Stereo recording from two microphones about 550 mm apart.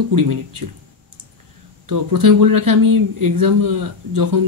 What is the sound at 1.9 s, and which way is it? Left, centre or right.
Speech, right.